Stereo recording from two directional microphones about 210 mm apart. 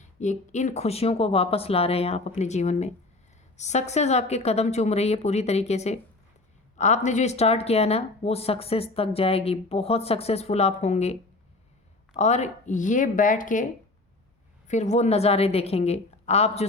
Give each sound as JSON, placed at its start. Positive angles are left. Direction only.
{"t": 0.2, "sound": "a woman's voice", "side_deg": 35}
{"t": 14.7, "sound": "a woman's voice", "side_deg": 35}